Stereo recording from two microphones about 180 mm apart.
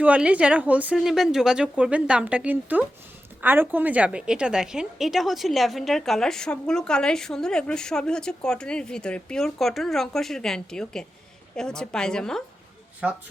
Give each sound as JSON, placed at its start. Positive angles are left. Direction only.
{"t": 0.0, "sound": "a woman's voice", "side_deg": -5}